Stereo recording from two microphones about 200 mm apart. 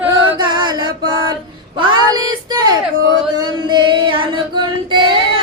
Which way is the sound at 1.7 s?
25° right (ahead or behind).